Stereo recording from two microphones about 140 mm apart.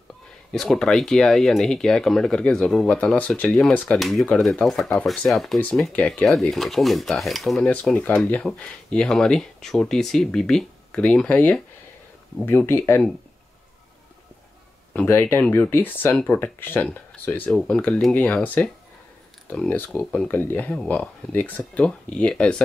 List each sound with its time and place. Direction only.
0.5 s speech: 5° left (ahead or behind)
14.9 s speech: 15° left (ahead or behind)